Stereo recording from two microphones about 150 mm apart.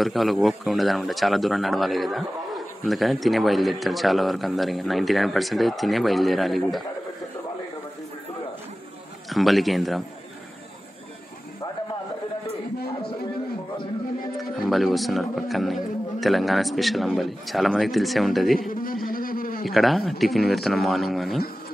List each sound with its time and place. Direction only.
0.0 s speech: centre (ahead or behind)
9.3 s speech: centre (ahead or behind)
14.7 s speech: centre (ahead or behind)
18.7 s a sound: 70° left (ahead or behind)
19.6 s speech: centre (ahead or behind)